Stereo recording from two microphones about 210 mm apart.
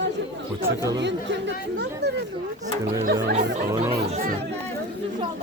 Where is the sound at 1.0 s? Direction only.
55° right (ahead or behind).